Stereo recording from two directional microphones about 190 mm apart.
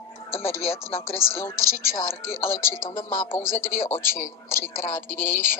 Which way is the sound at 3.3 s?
10° left (ahead or behind).